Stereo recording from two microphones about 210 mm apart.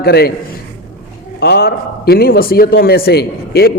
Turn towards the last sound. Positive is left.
turn(degrees=50)  # may be behind; listen again after turning